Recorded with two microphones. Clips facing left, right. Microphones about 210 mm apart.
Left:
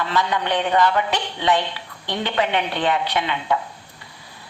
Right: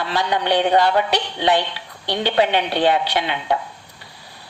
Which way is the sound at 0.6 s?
35° right (ahead or behind).